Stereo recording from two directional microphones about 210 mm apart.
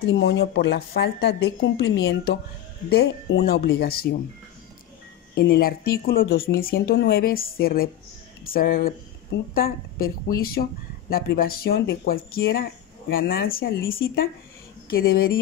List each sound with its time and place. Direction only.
0.0 s a woman's voice: 50° left (ahead or behind)
5.3 s speech: 50° left (ahead or behind)